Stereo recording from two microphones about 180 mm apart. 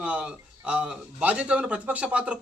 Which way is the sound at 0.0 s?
5° right (ahead or behind).